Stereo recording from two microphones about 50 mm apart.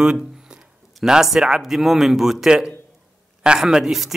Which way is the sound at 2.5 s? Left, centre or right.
Centre.